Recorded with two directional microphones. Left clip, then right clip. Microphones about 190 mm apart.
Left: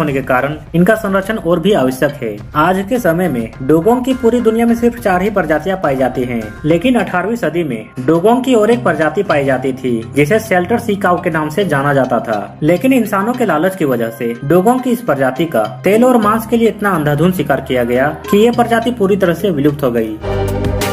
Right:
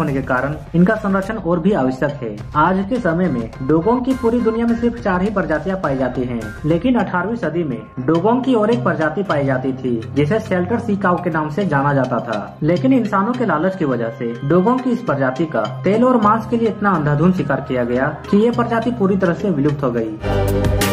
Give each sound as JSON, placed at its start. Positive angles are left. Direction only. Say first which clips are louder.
{"t": 0.0, "sound": "speech", "louder": "left 5 dB", "side_deg": 25}